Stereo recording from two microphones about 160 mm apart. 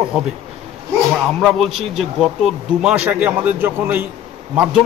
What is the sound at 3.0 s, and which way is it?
Speech, 10° right (ahead or behind).